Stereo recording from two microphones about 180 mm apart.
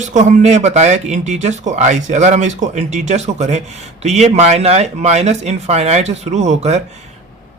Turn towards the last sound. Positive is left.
turn(degrees=-40)  # may be behind; listen again after turning